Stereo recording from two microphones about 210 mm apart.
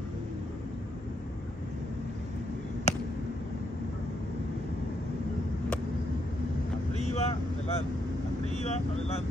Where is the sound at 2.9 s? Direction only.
30° left (ahead or behind).